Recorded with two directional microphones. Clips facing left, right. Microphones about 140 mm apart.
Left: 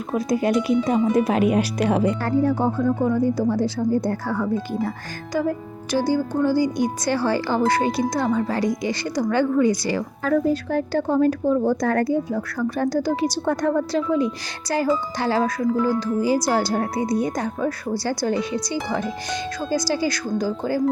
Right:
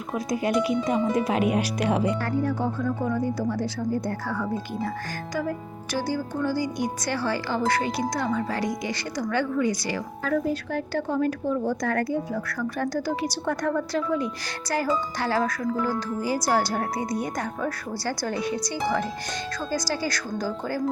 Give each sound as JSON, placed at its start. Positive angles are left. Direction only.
{"t": 0.1, "sound": "speech", "side_deg": 35}
{"t": 19.9, "sound": "speech", "side_deg": 15}